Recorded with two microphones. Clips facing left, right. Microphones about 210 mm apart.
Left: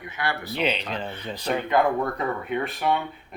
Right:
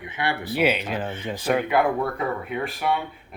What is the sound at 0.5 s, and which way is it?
Speech, 5° right (ahead or behind).